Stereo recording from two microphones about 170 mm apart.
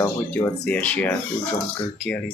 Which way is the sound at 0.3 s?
10° left (ahead or behind).